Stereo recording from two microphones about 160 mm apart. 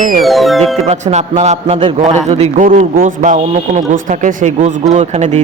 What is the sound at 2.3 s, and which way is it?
A man's voice, 45° right (ahead or behind).